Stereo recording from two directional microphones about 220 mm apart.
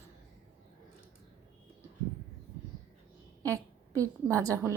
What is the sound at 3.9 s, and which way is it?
Speech, 15° right (ahead or behind).